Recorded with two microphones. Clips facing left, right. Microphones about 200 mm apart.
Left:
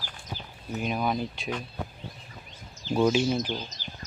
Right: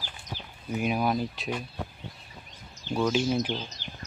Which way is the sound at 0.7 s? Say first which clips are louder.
Right 2 dB; 5° right (ahead or behind).